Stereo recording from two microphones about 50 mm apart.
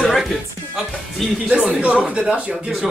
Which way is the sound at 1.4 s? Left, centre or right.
Centre.